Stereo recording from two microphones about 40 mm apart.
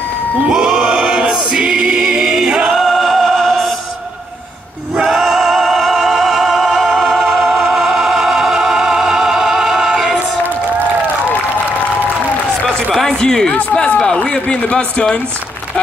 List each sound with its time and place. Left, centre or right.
0.5 s choir: centre
2.7 s music: centre
5.0 s music: centre
13.2 s a sound: centre
13.7 s speech: centre